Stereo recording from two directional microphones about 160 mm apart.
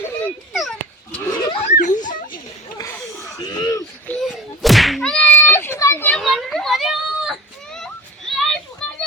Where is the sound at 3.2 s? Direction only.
20° left (ahead or behind).